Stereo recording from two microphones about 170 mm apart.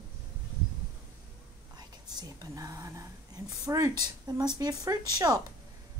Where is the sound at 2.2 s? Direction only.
20° right (ahead or behind).